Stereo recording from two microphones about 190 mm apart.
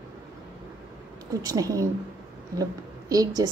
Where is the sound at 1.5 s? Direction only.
20° right (ahead or behind).